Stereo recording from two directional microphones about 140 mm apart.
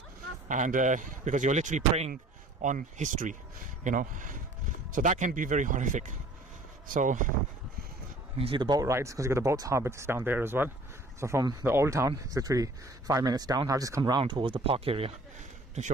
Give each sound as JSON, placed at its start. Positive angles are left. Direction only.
{"t": 0.5, "sound": "speech", "side_deg": -65}
{"t": 8.4, "sound": "speech", "side_deg": -35}